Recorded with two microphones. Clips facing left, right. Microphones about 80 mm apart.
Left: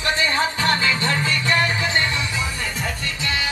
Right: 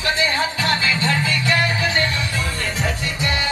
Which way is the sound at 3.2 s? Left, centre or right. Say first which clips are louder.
Right 2 dB; right.